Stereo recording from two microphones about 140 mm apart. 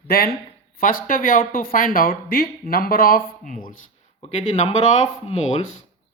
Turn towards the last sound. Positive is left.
turn(degrees=55)  # may be behind; listen again after turning